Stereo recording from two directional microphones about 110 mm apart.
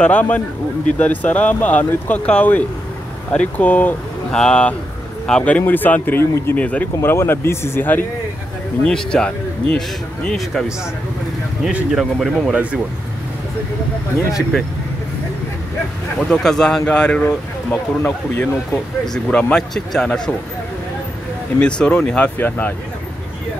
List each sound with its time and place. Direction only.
0.0 s speech: 15° left (ahead or behind)
8.8 s speech: 5° left (ahead or behind)
16.2 s speech: 5° left (ahead or behind)
21.5 s speech: 10° left (ahead or behind)